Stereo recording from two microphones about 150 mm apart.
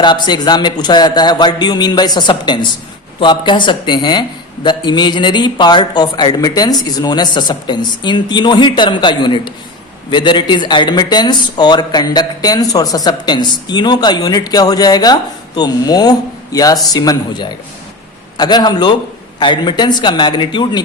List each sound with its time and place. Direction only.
0.0 s speech: 30° left (ahead or behind)